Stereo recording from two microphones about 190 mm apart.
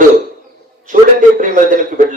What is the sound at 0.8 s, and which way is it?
A man's voice, 45° right (ahead or behind).